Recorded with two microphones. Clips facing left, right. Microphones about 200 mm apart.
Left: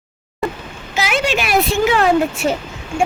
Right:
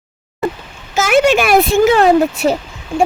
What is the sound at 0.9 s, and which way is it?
A child's voice, 50° right (ahead or behind).